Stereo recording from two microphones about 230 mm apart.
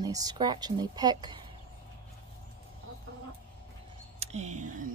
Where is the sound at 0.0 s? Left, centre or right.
Centre.